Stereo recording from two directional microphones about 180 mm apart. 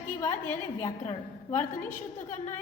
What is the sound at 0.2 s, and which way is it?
Speech, 20° left (ahead or behind).